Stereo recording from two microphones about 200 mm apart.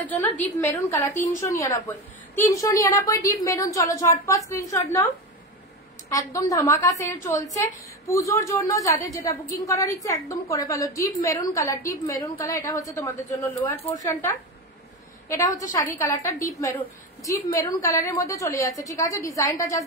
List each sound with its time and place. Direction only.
0.0 s a woman's voice: 10° left (ahead or behind)
6.0 s a woman's voice: 15° left (ahead or behind)